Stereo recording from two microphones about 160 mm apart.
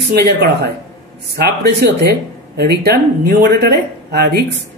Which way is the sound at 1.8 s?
90° right.